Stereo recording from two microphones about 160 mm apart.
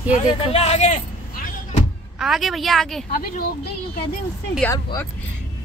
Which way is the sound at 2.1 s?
Centre (ahead or behind).